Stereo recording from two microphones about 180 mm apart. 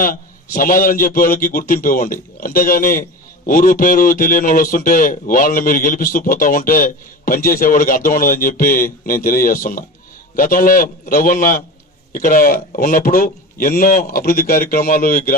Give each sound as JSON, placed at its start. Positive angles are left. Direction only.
{"t": 0.0, "sound": "a man's voice", "side_deg": 50}